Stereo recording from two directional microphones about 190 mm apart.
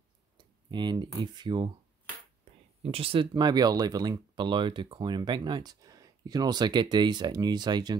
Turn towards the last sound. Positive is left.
turn(degrees=-20)  # may be behind; listen again after turning